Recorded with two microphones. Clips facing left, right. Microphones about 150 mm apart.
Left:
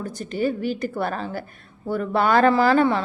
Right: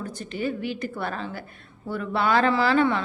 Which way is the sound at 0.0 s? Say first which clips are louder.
Left 5 dB; 40° left (ahead or behind).